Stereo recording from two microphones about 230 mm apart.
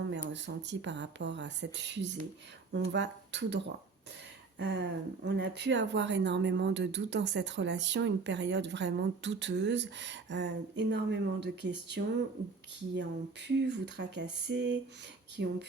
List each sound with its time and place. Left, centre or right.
0.1 s speech: right